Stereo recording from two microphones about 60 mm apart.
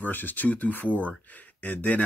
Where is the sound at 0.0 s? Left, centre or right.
Left.